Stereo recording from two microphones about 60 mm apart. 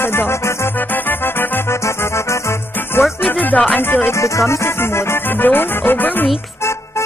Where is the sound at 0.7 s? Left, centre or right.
Left.